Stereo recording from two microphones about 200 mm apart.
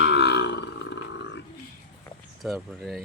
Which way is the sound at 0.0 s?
55° left (ahead or behind).